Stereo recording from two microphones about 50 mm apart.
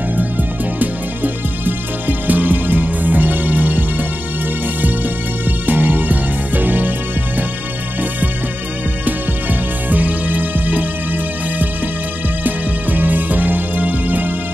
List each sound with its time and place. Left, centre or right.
0.2 s music: right
5.7 s music: right
9.0 s music: right
12.4 s music: right